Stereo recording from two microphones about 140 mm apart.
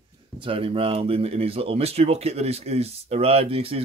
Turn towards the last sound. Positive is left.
turn(degrees=-45)  # may be behind; listen again after turning